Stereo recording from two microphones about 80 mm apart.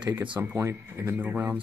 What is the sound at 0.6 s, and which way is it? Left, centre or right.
Speech, right.